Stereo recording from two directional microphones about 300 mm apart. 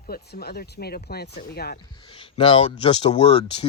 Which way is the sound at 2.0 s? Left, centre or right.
Centre.